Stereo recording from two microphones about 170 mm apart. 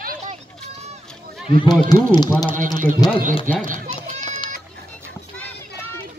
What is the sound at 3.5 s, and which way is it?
Speech, 50° right (ahead or behind).